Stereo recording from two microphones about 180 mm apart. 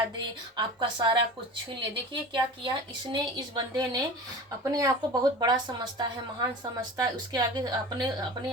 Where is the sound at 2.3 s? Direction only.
25° right (ahead or behind).